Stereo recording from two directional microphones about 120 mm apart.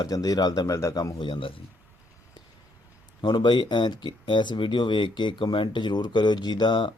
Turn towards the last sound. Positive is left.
turn(degrees=40)  # may be behind; listen again after turning